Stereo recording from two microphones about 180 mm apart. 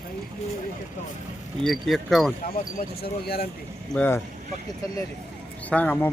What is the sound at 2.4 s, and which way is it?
Speech, 55° left (ahead or behind).